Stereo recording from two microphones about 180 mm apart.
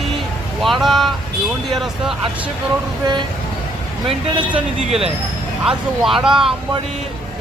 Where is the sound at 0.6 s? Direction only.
Centre (ahead or behind).